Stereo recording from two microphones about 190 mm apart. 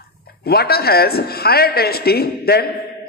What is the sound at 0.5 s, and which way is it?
A man's voice, 55° left (ahead or behind).